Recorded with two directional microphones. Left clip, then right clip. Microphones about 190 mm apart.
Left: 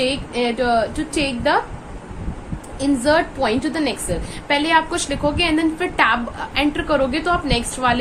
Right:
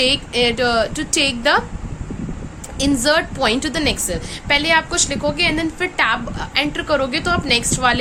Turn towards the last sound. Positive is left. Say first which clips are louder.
# right 3 dB
turn(degrees=-25)  # may be behind; listen again after turning